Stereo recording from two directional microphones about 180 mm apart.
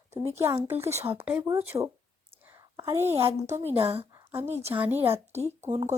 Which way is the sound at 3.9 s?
30° right (ahead or behind).